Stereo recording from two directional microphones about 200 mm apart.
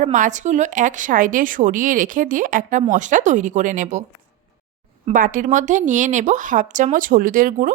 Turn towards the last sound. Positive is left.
turn(degrees=-45)  # may be behind; listen again after turning